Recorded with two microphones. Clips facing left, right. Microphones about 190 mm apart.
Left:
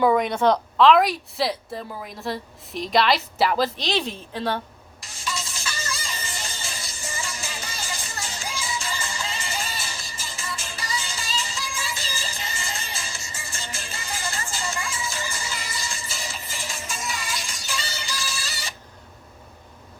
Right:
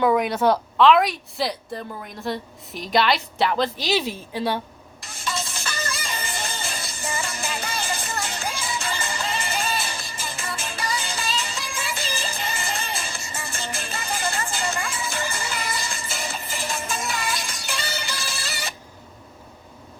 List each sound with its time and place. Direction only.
0.0 s a woman's voice: 5° right (ahead or behind)
5.0 s music: 60° right (ahead or behind)